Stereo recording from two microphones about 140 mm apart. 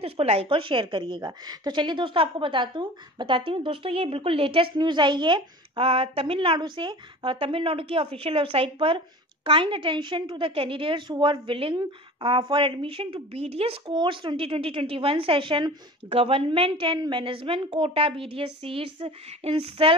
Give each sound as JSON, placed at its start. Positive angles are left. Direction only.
{"t": 0.0, "sound": "a woman's voice", "side_deg": -45}